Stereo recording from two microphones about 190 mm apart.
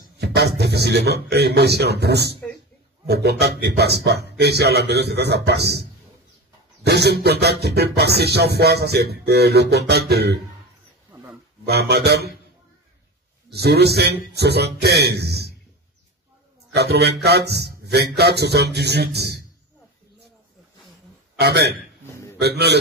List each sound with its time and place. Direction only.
0.2 s music: 60° right (ahead or behind)
11.6 s music: 60° right (ahead or behind)
13.5 s music: 60° right (ahead or behind)
16.7 s music: 60° right (ahead or behind)
21.4 s music: 60° right (ahead or behind)
22.0 s a sound: 10° left (ahead or behind)
22.4 s music: 60° right (ahead or behind)